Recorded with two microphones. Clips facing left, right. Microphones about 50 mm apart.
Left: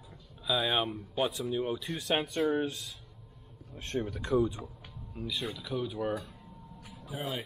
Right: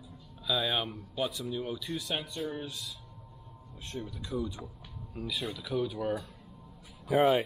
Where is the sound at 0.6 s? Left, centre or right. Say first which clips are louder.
Left 2 dB; centre.